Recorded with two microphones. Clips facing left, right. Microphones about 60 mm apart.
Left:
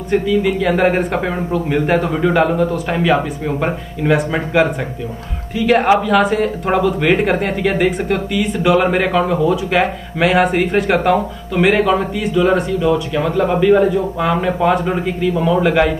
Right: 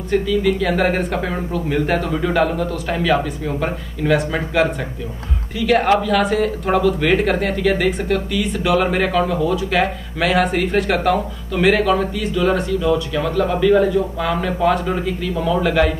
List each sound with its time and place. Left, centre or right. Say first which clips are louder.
0.1 s speech: left 2 dB; centre
5.7 s speech: left 3 dB; centre